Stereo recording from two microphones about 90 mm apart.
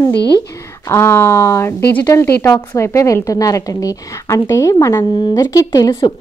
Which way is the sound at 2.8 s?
35° left (ahead or behind).